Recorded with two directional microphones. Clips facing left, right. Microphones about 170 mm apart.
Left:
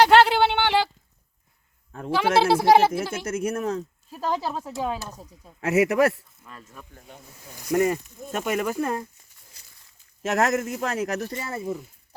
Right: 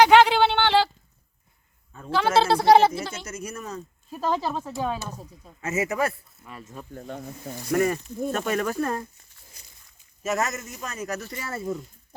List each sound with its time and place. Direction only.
0.2 s a sound: 10° left (ahead or behind)
2.0 s speech: 10° left (ahead or behind)
3.2 s a man's voice: 55° left (ahead or behind)
4.1 s speech: 10° left (ahead or behind)
5.5 s a man's voice: 65° left (ahead or behind); by 6.2 s 85° left
6.4 s speech: 10° right (ahead or behind)
7.7 s speech: 15° left (ahead or behind)
10.3 s a man's voice: 60° left (ahead or behind)
11.6 s speech: 10° left (ahead or behind)